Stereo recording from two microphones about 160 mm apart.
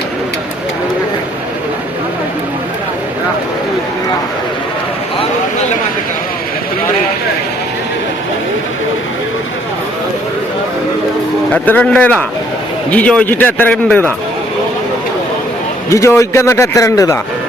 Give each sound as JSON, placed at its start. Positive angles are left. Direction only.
{"t": 11.5, "sound": "a man's voice", "side_deg": 10}
{"t": 15.9, "sound": "a man's voice", "side_deg": 20}